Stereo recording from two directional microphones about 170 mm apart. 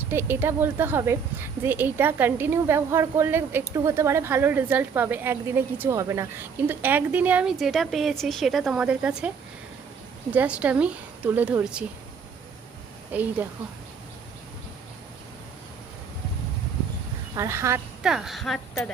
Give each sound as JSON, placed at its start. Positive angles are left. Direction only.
{"t": 0.1, "sound": "a woman's voice", "side_deg": -10}
{"t": 10.3, "sound": "a woman's voice", "side_deg": -10}
{"t": 13.1, "sound": "a woman's voice", "side_deg": -10}
{"t": 17.3, "sound": "a woman's voice", "side_deg": -15}
{"t": 18.0, "sound": "a woman's voice", "side_deg": 0}